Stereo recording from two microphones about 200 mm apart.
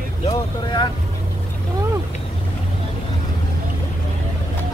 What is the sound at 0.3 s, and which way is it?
Vehicle, 25° left (ahead or behind).